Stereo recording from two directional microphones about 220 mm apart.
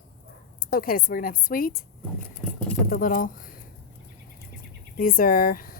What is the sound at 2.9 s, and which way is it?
Speech, 40° left (ahead or behind).